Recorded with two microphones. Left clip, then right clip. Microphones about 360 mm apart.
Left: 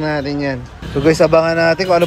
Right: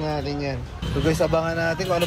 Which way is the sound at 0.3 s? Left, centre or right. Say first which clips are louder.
Left 8 dB; left.